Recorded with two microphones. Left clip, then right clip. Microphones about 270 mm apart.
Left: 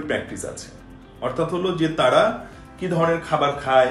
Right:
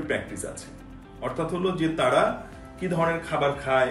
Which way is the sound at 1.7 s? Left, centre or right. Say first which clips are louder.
Left 5 dB; centre.